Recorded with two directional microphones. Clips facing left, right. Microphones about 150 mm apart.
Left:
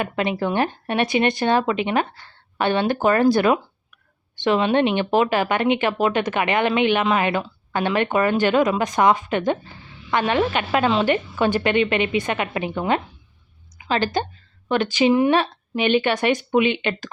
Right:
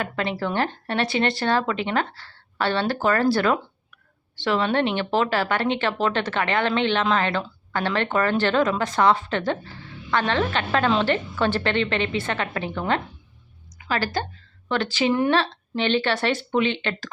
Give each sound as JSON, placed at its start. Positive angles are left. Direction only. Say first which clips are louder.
{"t": 0.0, "sound": "a woman's voice", "louder": "left 3 dB", "side_deg": 15}